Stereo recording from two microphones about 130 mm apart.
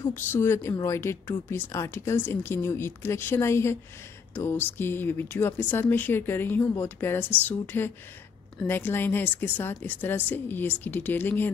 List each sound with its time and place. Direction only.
0.1 s a woman's voice: 20° left (ahead or behind)